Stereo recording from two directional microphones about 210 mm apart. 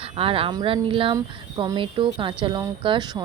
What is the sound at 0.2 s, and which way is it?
Speech, 25° right (ahead or behind).